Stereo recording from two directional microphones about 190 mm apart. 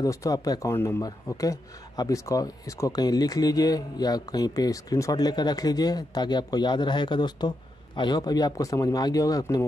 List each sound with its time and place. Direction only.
0.0 s speech: 15° left (ahead or behind)